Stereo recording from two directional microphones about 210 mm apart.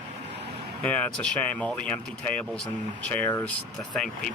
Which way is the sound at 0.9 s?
5° left (ahead or behind).